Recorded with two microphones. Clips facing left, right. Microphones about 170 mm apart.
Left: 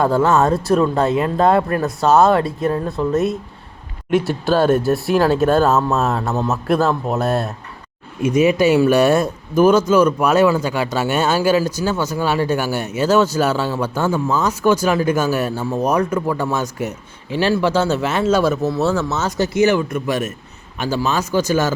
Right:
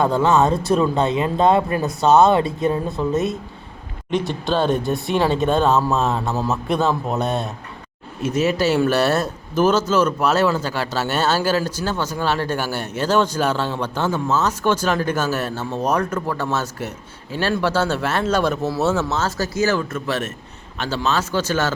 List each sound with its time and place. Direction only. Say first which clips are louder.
0.0 s speech: left 1 dB; 5° left (ahead or behind)
8.2 s speech: left 5 dB; 15° left (ahead or behind)
19.4 s speech: left 7 dB; 20° left (ahead or behind)